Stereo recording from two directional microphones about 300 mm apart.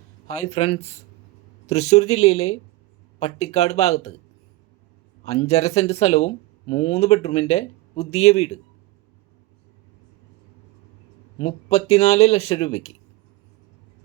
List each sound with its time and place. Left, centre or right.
0.3 s speech: left
5.2 s speech: left
11.3 s speech: centre